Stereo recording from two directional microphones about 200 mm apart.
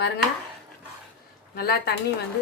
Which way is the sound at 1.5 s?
50° left (ahead or behind).